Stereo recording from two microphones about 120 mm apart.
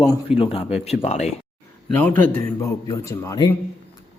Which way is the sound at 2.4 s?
30° left (ahead or behind).